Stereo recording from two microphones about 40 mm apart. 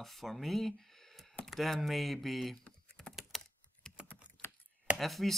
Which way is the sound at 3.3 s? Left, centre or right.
Centre.